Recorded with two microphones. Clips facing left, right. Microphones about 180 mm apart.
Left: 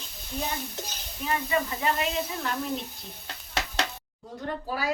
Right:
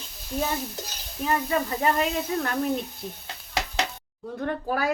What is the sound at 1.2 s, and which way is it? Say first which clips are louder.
Speech: right 3 dB; 40° right (ahead or behind).